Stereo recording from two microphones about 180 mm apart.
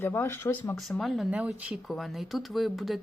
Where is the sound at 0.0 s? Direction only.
10° left (ahead or behind).